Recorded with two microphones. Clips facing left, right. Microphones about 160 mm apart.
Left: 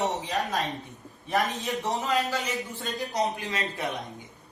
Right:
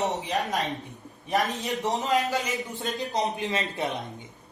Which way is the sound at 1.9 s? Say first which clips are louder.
Right 3 dB; 20° right (ahead or behind).